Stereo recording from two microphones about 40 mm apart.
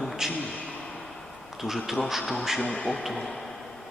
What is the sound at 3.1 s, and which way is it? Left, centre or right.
Speech, centre.